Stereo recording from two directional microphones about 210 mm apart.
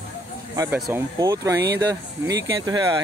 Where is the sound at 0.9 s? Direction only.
15° right (ahead or behind).